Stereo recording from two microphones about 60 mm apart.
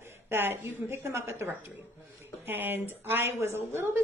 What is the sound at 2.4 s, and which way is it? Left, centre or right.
A woman's voice, right.